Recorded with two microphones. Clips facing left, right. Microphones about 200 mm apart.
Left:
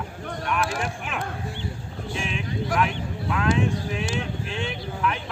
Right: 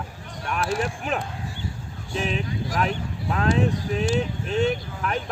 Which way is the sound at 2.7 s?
35° right (ahead or behind).